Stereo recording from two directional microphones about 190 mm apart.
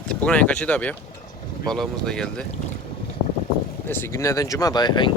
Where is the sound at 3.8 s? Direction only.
10° left (ahead or behind).